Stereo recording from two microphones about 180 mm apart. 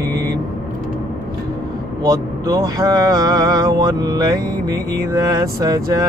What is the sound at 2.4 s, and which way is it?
Mantra, 20° right (ahead or behind).